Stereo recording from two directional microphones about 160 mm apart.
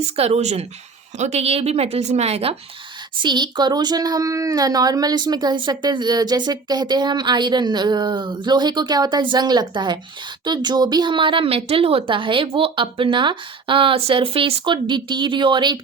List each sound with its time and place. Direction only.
0.2 s speech: 45° right (ahead or behind)
3.2 s speech: 30° right (ahead or behind)